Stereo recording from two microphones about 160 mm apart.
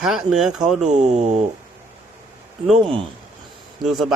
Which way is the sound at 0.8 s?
45° right (ahead or behind).